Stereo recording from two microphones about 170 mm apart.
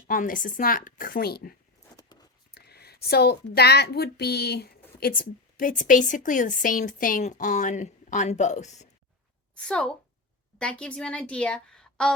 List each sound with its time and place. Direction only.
0.1 s speech: 55° left (ahead or behind)
2.6 s speech: 70° left (ahead or behind); by 8.9 s 45° left (ahead or behind)
9.6 s a woman's voice: 5° left (ahead or behind)